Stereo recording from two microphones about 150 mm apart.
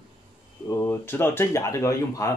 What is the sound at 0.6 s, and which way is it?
Speech, 15° left (ahead or behind).